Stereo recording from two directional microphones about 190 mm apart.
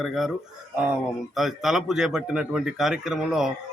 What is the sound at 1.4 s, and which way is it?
Speech, centre (ahead or behind).